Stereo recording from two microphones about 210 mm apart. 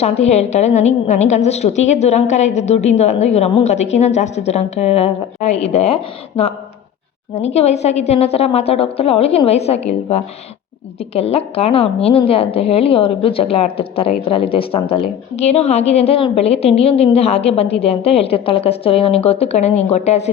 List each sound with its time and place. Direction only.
0.0 s a woman's voice: 30° left (ahead or behind)